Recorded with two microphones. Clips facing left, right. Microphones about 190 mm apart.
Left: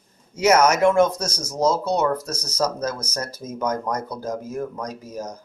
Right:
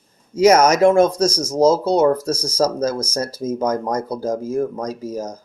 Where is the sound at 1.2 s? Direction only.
90° right.